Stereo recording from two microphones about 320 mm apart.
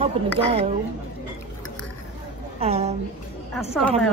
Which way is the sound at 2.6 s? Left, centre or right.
Centre.